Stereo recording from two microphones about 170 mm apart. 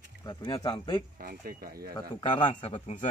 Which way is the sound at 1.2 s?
60° right (ahead or behind).